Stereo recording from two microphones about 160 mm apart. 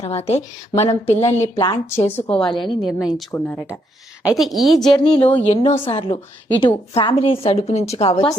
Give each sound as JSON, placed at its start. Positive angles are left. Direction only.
{"t": 0.1, "sound": "a woman's voice", "side_deg": 40}
{"t": 1.4, "sound": "speech", "side_deg": 25}
{"t": 2.0, "sound": "speech", "side_deg": 15}
{"t": 2.3, "sound": "speech", "side_deg": 30}
{"t": 3.0, "sound": "a woman's voice", "side_deg": 0}
{"t": 3.3, "sound": "a woman's voice", "side_deg": 10}
{"t": 4.9, "sound": "speech", "side_deg": 30}
{"t": 5.1, "sound": "speech", "side_deg": 10}
{"t": 5.5, "sound": "a woman's voice", "side_deg": 35}